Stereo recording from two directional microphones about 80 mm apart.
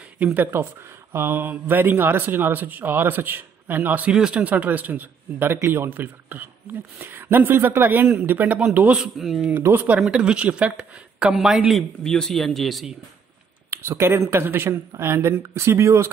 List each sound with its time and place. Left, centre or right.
0.2 s a man's voice: centre
1.1 s a man's voice: right
9.0 s speech: centre
9.6 s a man's voice: right
9.9 s speech: centre
11.7 s speech: centre
13.7 s speech: right